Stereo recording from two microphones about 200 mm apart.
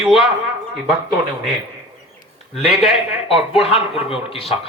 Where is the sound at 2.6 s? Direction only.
Centre (ahead or behind).